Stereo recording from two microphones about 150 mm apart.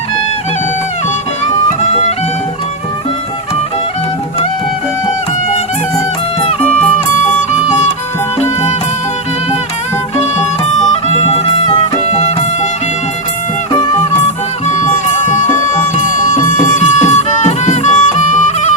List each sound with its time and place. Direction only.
6.4 s music: 40° left (ahead or behind)
11.1 s music: 45° left (ahead or behind)
16.0 s music: 60° left (ahead or behind)